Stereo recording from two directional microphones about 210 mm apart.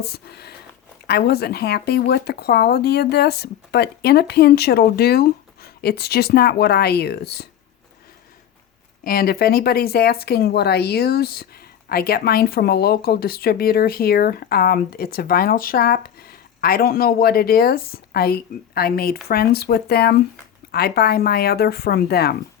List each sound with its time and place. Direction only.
0.0 s speech: 50° left (ahead or behind)
9.0 s speech: 45° left (ahead or behind)